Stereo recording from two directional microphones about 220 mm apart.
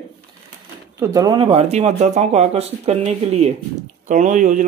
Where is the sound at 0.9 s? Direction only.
15° right (ahead or behind).